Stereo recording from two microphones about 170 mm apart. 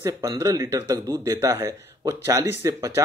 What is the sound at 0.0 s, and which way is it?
Speech, 20° right (ahead or behind).